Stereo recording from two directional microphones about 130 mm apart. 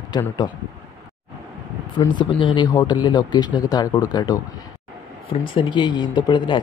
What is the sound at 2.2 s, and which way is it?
Speech, 35° left (ahead or behind).